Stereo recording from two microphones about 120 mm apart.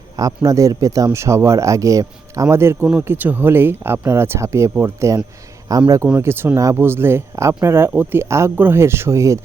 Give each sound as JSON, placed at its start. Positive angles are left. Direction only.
{"t": 0.2, "sound": "speech", "side_deg": -30}
{"t": 6.1, "sound": "speech", "side_deg": -20}